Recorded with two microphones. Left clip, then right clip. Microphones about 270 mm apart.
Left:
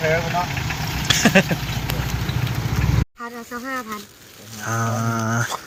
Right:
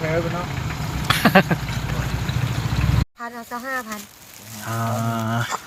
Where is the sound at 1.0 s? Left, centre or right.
Centre.